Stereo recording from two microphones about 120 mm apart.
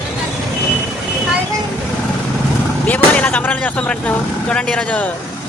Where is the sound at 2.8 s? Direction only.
15° left (ahead or behind).